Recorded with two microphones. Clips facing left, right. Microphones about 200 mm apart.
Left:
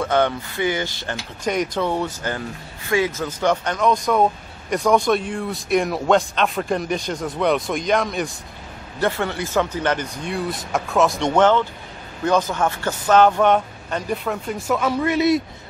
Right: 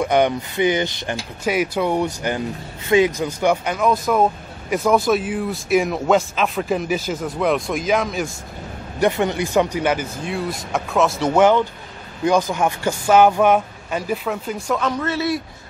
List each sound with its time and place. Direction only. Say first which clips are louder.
0.0 s speech: right 2 dB; 15° right (ahead or behind)
1.4 s speech: right 2 dB; 5° right (ahead or behind)
9.0 s speech: right 4 dB; 15° right (ahead or behind); by 15.4 s 20° left (ahead or behind)